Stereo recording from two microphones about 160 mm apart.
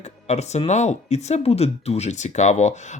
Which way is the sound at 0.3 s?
45° left (ahead or behind).